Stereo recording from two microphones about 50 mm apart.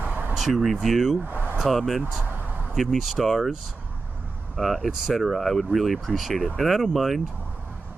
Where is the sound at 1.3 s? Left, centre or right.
Right.